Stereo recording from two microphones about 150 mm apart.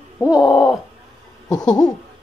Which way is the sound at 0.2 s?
25° left (ahead or behind).